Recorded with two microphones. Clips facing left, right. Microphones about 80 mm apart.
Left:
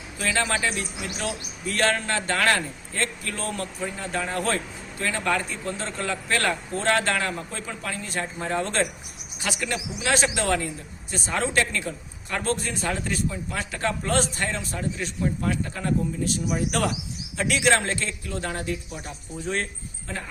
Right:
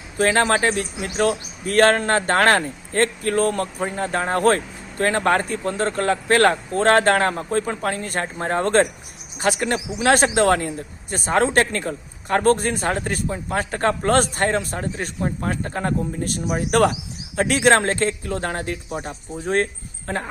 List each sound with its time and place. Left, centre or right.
0.2 s speech: right